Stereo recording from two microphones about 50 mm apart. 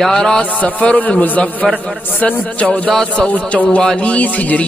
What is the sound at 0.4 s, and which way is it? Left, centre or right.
Music, left.